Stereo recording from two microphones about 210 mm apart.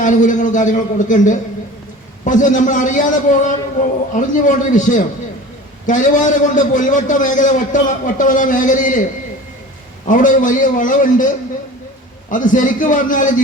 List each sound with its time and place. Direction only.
0.0 s a man's voice: 35° left (ahead or behind)
10.1 s a man's voice: 40° left (ahead or behind)
12.3 s a man's voice: 40° left (ahead or behind)